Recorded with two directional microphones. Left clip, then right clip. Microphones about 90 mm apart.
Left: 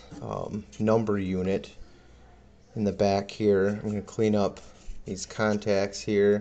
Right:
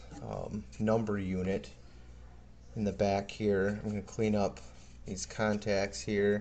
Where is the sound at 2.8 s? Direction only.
25° left (ahead or behind).